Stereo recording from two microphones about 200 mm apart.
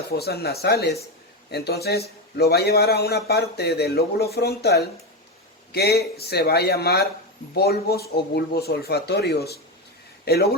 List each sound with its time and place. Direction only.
0.1 s a man's voice: 55° left (ahead or behind)